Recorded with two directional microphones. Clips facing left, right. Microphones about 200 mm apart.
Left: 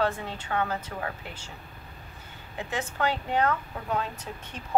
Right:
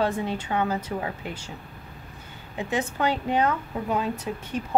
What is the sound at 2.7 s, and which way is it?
Speech, 15° right (ahead or behind).